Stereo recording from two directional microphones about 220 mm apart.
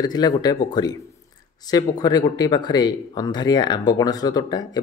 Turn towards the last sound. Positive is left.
turn(degrees=20)  # may be behind; listen again after turning